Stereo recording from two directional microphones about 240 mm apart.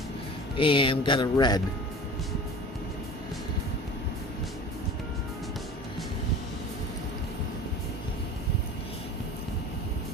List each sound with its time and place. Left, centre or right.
0.5 s speech: left